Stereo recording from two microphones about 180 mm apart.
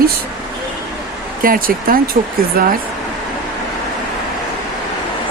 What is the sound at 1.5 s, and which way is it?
Speech, 55° right (ahead or behind).